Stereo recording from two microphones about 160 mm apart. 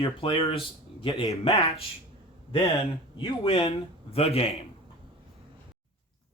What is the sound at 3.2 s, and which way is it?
Speech, 35° left (ahead or behind).